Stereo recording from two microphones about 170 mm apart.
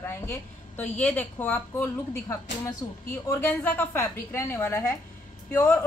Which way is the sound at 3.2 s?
10° left (ahead or behind).